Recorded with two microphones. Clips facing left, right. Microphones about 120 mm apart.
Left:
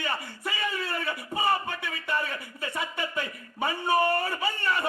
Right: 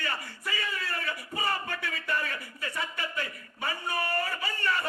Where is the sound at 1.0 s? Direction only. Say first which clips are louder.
Left 6 dB; 20° left (ahead or behind).